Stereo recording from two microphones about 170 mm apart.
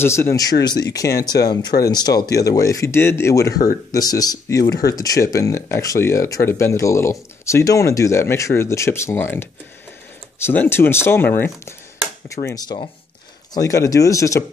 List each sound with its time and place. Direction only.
0.0 s speech: 15° left (ahead or behind)